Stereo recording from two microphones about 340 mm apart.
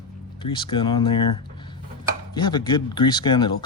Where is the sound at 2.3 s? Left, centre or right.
Centre.